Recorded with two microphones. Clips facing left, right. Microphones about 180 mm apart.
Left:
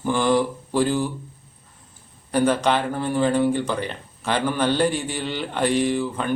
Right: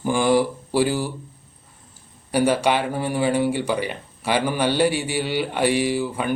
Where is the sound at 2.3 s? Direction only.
10° right (ahead or behind).